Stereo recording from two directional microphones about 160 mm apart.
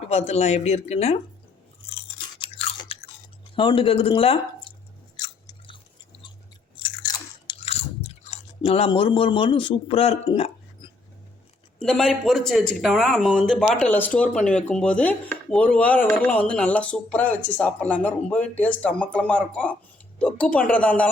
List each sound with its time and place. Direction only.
0.0 s speech: 45° left (ahead or behind)
2.1 s chewing: 35° left (ahead or behind)
3.5 s speech: 30° left (ahead or behind)
5.1 s chewing: 25° left (ahead or behind)
6.8 s biting: 30° left (ahead or behind)
7.6 s speech: 40° left (ahead or behind)
11.8 s speech: 5° left (ahead or behind)